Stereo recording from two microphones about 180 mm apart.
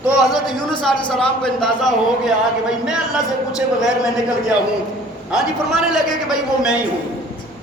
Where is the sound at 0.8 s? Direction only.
5° left (ahead or behind).